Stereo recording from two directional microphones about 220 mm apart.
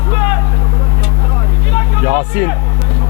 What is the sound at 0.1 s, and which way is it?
Vehicle, 15° left (ahead or behind).